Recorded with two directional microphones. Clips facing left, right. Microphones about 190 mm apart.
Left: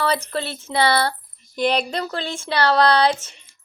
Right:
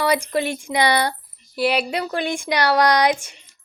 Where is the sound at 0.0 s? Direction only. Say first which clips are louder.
Right 3 dB; 15° right (ahead or behind).